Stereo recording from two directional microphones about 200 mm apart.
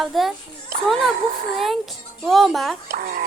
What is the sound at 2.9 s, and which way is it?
Speech, 45° right (ahead or behind).